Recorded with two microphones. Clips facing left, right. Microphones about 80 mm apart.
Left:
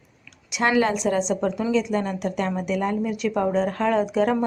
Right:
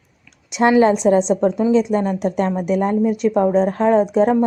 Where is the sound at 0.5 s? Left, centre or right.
Right.